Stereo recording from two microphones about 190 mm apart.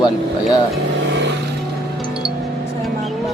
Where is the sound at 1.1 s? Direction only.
65° right (ahead or behind).